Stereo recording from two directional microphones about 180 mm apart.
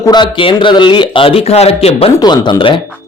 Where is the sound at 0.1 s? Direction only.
25° left (ahead or behind).